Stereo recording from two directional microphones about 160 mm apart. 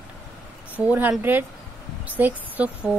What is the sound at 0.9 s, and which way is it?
Speech, 10° right (ahead or behind).